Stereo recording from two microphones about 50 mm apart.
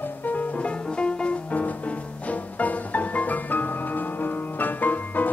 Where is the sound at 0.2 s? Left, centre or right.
Left.